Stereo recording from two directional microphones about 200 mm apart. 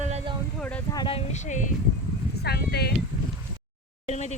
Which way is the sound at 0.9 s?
25° left (ahead or behind).